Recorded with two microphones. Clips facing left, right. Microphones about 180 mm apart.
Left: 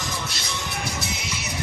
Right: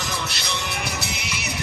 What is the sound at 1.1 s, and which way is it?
Music, 70° right (ahead or behind).